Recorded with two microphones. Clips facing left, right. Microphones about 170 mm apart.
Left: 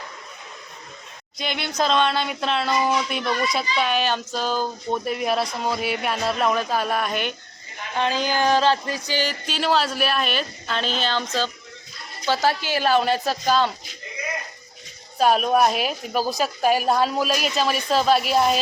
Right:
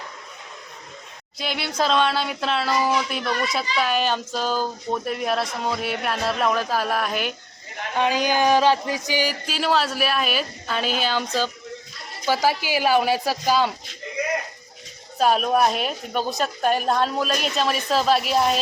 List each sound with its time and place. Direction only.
1.4 s a woman's voice: 5° right (ahead or behind)
15.2 s a woman's voice: centre (ahead or behind)